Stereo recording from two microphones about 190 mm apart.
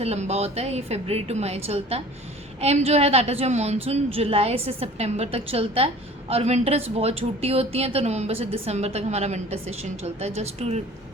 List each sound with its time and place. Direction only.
0.0 s a woman's voice: 35° right (ahead or behind)